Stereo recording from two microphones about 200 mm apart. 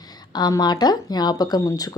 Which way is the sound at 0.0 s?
20° left (ahead or behind).